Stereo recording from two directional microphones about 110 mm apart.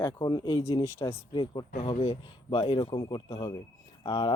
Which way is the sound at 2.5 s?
45° left (ahead or behind).